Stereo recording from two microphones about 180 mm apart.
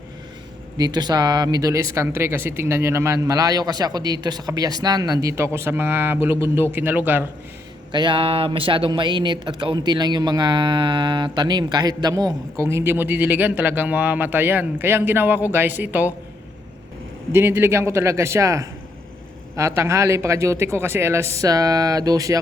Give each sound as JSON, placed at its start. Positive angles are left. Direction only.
{"t": 0.8, "sound": "speech", "side_deg": -20}
{"t": 7.9, "sound": "a man's voice", "side_deg": -30}
{"t": 17.3, "sound": "speech", "side_deg": -15}